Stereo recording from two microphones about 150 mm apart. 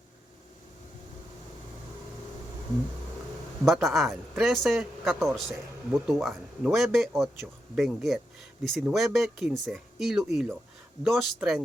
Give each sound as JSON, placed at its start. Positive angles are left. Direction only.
{"t": 3.7, "sound": "speech", "side_deg": 0}